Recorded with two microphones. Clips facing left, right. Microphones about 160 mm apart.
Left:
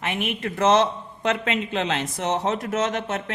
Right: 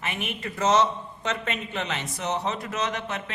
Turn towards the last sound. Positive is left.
turn(degrees=50)  # may be behind; listen again after turning